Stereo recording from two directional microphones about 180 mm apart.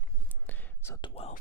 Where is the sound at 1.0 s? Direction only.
35° left (ahead or behind).